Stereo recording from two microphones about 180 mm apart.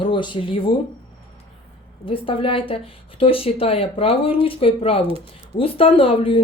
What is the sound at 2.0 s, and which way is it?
Speech, 30° left (ahead or behind).